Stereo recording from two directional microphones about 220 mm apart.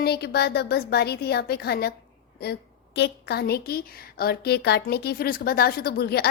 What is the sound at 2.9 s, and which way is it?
A woman's voice, 45° left (ahead or behind).